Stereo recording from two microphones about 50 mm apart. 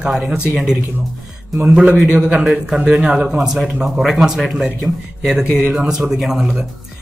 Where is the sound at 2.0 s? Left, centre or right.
Right.